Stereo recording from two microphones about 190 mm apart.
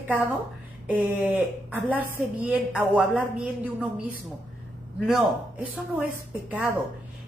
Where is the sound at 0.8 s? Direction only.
10° right (ahead or behind).